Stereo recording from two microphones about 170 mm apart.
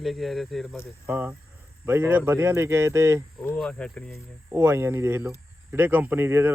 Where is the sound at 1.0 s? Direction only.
10° right (ahead or behind).